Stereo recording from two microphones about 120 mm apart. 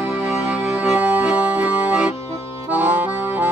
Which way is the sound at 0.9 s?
10° right (ahead or behind).